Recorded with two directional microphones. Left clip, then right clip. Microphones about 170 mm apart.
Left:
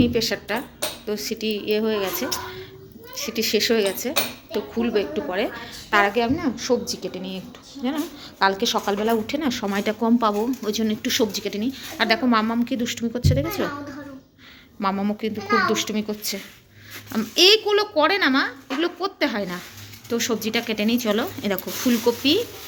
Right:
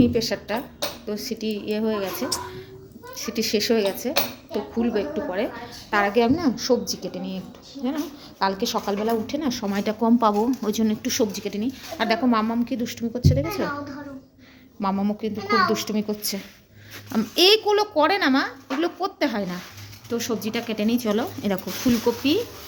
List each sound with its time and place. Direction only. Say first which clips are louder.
0.0 s a woman's voice: even; 5° right (ahead or behind)
6.1 s a child's voice: right 2 dB; 30° right (ahead or behind)
6.8 s a woman's voice: left 1 dB; 10° right (ahead or behind)
10.0 s a child's voice: right 2 dB; 15° right (ahead or behind)
11.0 s a woman's voice: left 2 dB; 10° right (ahead or behind)
14.8 s a woman's voice: left 1 dB; 5° right (ahead or behind)
20.1 s speech: left 3 dB; centre (ahead or behind)